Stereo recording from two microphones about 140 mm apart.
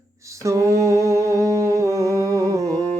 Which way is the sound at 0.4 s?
20° right (ahead or behind).